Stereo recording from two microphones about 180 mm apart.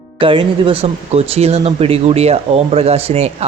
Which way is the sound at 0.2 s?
30° right (ahead or behind).